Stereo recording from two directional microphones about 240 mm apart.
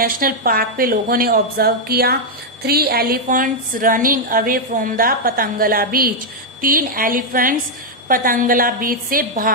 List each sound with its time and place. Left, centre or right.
0.0 s a woman's voice: right